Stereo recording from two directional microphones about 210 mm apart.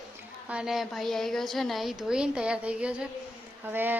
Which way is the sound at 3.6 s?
10° right (ahead or behind).